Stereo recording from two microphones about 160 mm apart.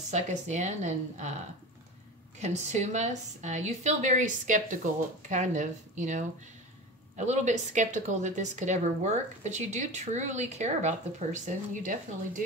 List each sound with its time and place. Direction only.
0.1 s a woman's voice: 45° right (ahead or behind)
2.4 s a woman's voice: 45° right (ahead or behind)